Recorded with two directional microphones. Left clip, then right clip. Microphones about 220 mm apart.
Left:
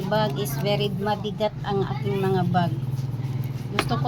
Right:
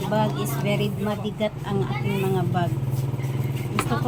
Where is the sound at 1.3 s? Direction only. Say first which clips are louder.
Left 1 dB; 35° left (ahead or behind).